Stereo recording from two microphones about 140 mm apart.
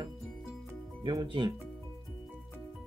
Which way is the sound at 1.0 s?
30° right (ahead or behind).